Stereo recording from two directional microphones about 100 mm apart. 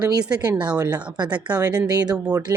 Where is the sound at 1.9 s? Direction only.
40° right (ahead or behind).